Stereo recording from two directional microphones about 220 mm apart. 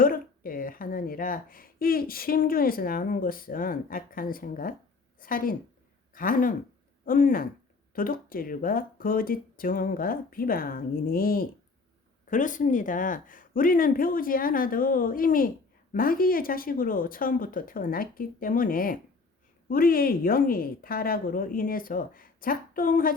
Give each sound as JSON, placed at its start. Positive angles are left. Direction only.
{"t": 0.0, "sound": "a woman's voice", "side_deg": 40}